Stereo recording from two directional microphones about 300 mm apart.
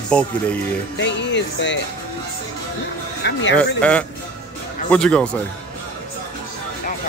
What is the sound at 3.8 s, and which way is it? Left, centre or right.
Speech, centre.